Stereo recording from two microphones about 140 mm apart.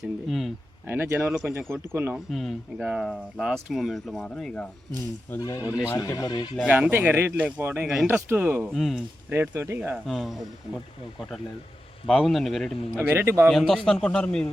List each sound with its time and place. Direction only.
0.3 s a sound: centre (ahead or behind)
0.9 s speech: 15° right (ahead or behind)
1.3 s speech: 5° right (ahead or behind)
1.9 s speech: 15° right (ahead or behind)
2.3 s speech: centre (ahead or behind)
5.4 s speech: 25° left (ahead or behind)
6.6 s speech: 10° right (ahead or behind)
8.7 s speech: centre (ahead or behind)
9.3 s speech: 15° right (ahead or behind)
9.9 s speech: centre (ahead or behind)
12.0 s speech: centre (ahead or behind)
13.0 s speech: 15° right (ahead or behind)
13.5 s speech: centre (ahead or behind)